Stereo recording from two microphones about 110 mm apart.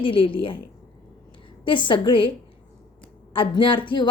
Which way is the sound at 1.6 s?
50° left (ahead or behind).